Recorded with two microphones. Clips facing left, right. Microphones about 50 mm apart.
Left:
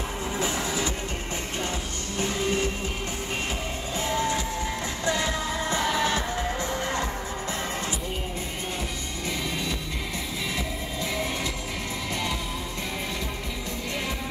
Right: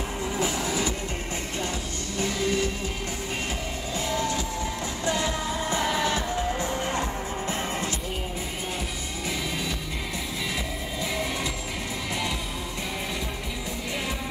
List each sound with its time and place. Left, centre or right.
0.4 s music: left
2.1 s music: left
4.1 s music: left
5.0 s music: left